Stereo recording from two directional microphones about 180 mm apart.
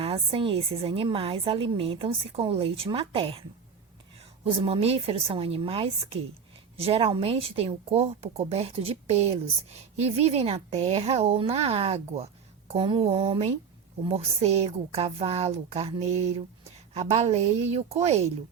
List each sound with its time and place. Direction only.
0.0 s a woman's voice: 30° right (ahead or behind)
4.4 s a woman's voice: 30° right (ahead or behind)